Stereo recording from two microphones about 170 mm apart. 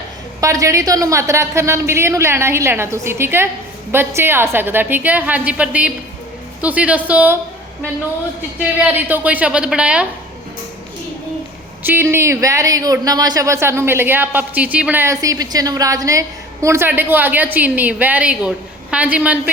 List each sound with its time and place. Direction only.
0.4 s speech: 20° right (ahead or behind)
8.4 s speech: 10° right (ahead or behind)
11.8 s speech: 10° right (ahead or behind)